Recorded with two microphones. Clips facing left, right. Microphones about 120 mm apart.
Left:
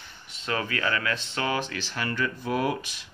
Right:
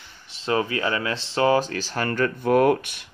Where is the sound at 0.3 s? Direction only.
30° right (ahead or behind).